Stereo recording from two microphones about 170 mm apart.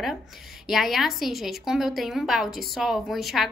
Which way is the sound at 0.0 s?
Centre (ahead or behind).